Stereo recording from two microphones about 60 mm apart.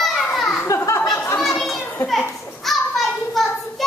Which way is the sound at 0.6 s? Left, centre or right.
Left.